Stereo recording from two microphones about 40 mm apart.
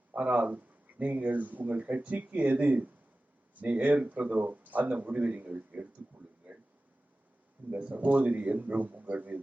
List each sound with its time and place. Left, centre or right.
0.1 s speech: right
7.7 s speech: right